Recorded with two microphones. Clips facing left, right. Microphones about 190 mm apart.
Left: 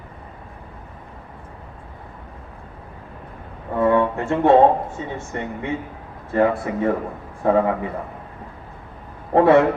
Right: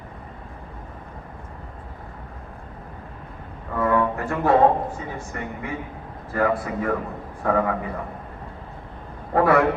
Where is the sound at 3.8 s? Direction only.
25° left (ahead or behind).